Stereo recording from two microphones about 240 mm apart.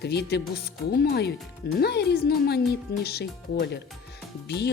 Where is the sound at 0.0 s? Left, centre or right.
Left.